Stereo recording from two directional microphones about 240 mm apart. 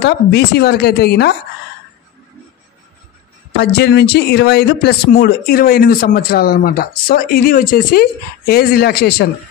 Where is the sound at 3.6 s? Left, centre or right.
Left.